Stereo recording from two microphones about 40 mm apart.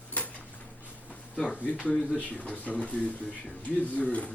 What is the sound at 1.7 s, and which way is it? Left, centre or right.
Speech, left.